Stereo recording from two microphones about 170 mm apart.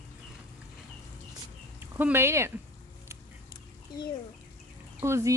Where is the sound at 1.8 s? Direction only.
10° right (ahead or behind).